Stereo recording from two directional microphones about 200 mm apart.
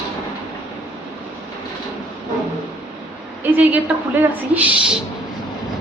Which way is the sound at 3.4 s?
10° right (ahead or behind).